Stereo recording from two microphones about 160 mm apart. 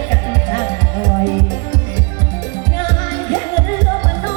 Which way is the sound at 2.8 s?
25° left (ahead or behind).